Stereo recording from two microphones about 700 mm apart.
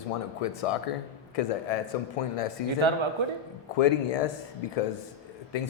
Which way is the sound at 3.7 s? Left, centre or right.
Left.